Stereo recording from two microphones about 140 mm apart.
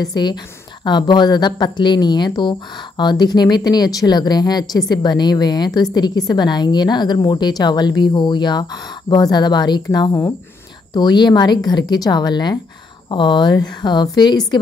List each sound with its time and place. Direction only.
0.0 s a woman's voice: 30° left (ahead or behind)